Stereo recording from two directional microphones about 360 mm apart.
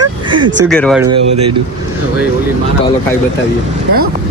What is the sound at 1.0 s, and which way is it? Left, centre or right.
Speech, right.